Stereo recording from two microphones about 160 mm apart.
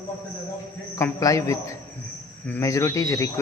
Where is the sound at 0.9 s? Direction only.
20° left (ahead or behind).